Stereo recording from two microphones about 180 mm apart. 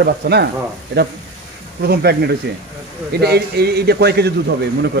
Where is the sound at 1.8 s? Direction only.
65° right (ahead or behind).